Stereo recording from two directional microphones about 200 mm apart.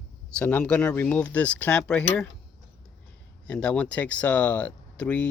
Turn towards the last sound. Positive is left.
turn(degrees=5)  # may be behind; listen again after turning